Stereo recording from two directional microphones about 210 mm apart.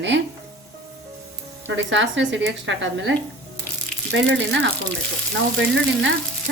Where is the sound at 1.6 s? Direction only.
60° right (ahead or behind).